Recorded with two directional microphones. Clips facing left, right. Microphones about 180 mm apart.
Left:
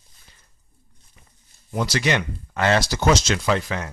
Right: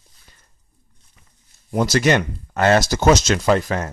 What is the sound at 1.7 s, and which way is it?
Speech, 45° right (ahead or behind).